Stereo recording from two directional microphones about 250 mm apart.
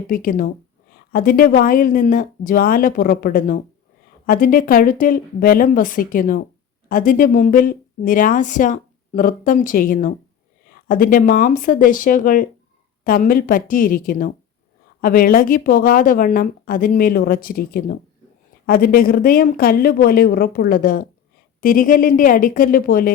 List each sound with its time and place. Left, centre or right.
0.1 s speech: left